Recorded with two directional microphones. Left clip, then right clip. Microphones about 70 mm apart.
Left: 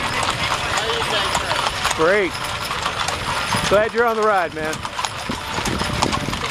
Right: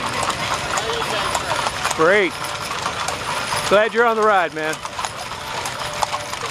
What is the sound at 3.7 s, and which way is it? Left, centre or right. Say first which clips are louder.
Speech: right 2 dB; right.